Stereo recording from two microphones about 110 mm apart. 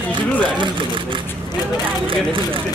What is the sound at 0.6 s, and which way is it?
Speech, 45° right (ahead or behind).